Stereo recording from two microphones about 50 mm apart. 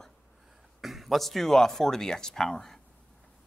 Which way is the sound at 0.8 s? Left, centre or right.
Centre.